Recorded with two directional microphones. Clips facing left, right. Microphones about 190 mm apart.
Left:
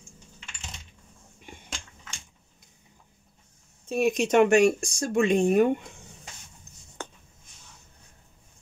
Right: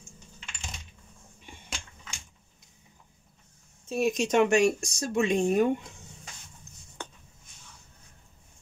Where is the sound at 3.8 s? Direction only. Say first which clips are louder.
Left 2 dB; 60° left (ahead or behind).